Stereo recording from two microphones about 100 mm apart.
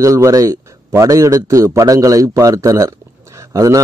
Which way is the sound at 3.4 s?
35° right (ahead or behind).